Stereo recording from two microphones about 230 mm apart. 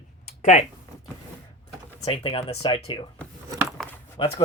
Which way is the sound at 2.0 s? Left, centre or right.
Left.